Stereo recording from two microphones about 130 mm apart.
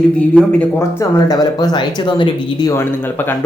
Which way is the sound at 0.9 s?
30° left (ahead or behind).